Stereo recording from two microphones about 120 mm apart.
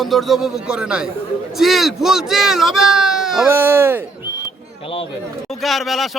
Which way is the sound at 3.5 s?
20° right (ahead or behind).